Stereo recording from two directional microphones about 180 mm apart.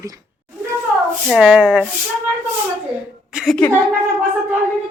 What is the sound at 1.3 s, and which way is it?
Speech, centre (ahead or behind).